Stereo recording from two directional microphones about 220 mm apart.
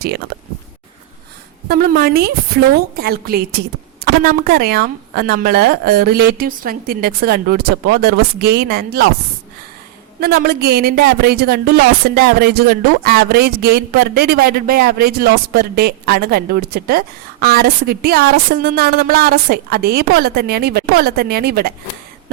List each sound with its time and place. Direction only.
1.6 s speech: 40° right (ahead or behind)
10.2 s speech: 45° right (ahead or behind)